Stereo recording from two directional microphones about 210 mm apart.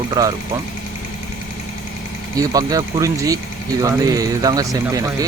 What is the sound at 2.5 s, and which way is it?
Speech, 15° right (ahead or behind).